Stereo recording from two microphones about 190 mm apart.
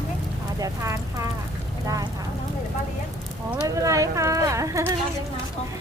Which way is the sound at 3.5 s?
15° right (ahead or behind).